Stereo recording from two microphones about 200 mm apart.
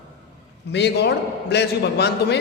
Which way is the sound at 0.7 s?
60° left (ahead or behind).